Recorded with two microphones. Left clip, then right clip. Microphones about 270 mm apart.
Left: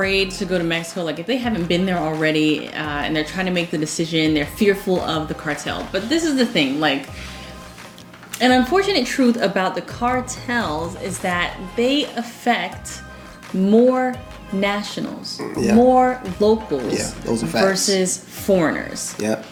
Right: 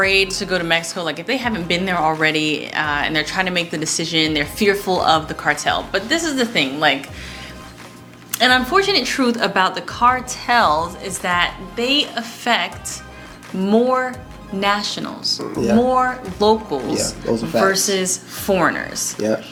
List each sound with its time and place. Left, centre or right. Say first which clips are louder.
0.0 s a woman's voice: right 4 dB; right
8.3 s a woman's voice: right 2 dB; right
16.8 s speech: right 2 dB; centre
17.7 s speech: right 1 dB; right
19.1 s speech: right 3 dB; centre